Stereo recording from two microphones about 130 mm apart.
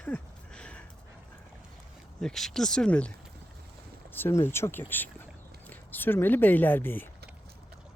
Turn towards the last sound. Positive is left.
turn(degrees=15)  # may be behind; listen again after turning